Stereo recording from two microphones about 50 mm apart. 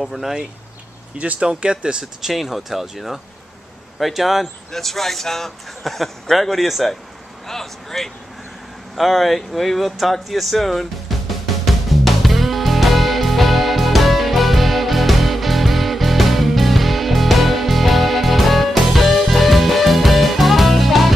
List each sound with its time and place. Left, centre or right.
0.0 s speech: centre
1.1 s speech: right
2.2 s speech: centre
8.9 s a sound: centre